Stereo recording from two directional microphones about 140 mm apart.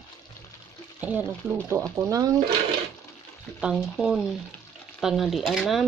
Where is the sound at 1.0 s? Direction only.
10° right (ahead or behind).